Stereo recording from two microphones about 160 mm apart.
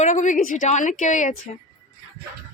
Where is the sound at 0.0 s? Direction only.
50° left (ahead or behind).